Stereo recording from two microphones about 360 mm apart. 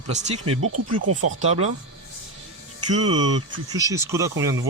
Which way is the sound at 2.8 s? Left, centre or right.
Right.